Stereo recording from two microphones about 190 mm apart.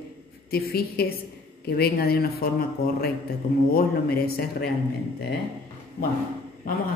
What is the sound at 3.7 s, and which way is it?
Speech, 55° left (ahead or behind).